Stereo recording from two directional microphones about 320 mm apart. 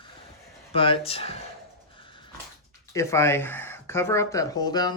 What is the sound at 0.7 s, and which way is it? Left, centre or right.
Speech, centre.